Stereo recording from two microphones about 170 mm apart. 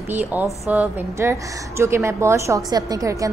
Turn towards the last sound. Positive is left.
turn(degrees=-20)  # may be behind; listen again after turning